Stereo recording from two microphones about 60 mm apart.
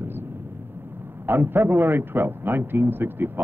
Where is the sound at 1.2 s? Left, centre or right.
Right.